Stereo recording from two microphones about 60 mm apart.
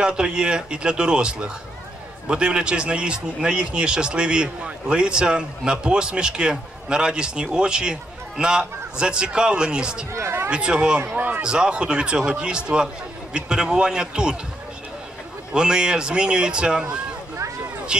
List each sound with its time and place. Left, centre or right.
0.0 s a man's voice: centre
10.1 s speech: right
10.5 s speech: centre
11.4 s a man's voice: centre
15.5 s a man's voice: centre